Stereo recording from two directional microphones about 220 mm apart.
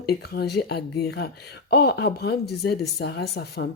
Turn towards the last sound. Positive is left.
turn(degrees=45)  # may be behind; listen again after turning